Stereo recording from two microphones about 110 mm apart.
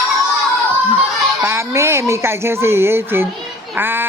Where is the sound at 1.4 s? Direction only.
25° right (ahead or behind).